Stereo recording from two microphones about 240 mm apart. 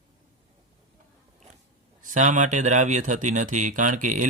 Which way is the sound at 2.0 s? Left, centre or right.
Right.